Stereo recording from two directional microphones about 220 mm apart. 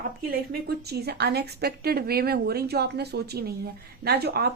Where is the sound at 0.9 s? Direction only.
45° right (ahead or behind).